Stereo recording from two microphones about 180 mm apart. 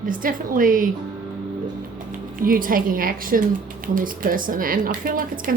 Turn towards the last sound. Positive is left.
turn(degrees=-50)  # may be behind; listen again after turning